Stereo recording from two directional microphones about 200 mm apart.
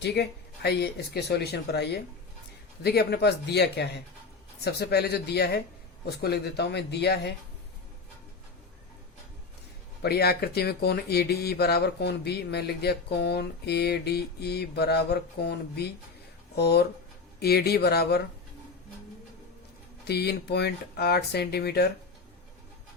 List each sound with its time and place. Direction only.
0.0 s speech: 55° left (ahead or behind)
10.0 s speech: 55° left (ahead or behind)
20.1 s speech: 55° left (ahead or behind)